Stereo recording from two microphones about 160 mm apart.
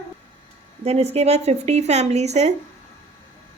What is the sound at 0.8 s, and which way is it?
Speech, 40° right (ahead or behind).